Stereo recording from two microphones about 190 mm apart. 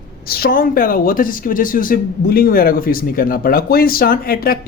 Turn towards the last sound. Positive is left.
turn(degrees=50)  # may be behind; listen again after turning